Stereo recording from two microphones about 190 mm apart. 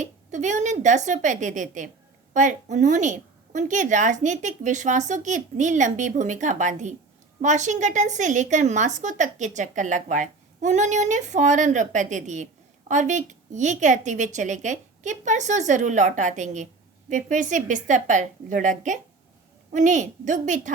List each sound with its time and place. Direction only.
0.0 s speech: 40° right (ahead or behind)